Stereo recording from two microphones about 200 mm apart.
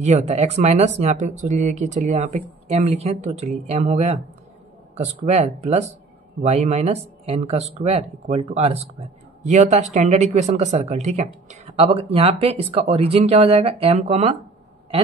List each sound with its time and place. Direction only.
0.0 s speech: 35° right (ahead or behind)